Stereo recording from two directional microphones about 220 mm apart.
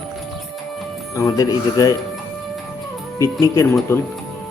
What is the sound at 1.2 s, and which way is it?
Speech, 15° left (ahead or behind).